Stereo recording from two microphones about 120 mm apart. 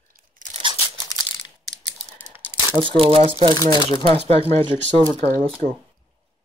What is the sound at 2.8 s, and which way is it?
Speech, 45° right (ahead or behind).